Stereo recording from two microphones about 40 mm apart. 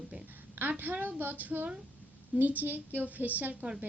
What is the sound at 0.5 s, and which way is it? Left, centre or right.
A woman's voice, right.